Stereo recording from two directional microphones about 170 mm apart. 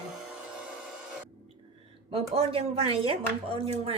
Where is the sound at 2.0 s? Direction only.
35° right (ahead or behind).